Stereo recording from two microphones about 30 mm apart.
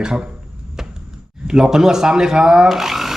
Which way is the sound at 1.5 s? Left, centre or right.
Centre.